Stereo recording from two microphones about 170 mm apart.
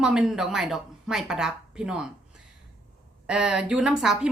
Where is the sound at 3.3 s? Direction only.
5° right (ahead or behind).